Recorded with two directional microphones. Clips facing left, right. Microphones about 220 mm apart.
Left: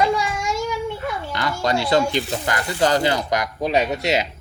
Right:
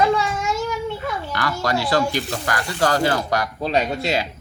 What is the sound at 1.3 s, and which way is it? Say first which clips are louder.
Speech: left 1 dB; 20° left (ahead or behind).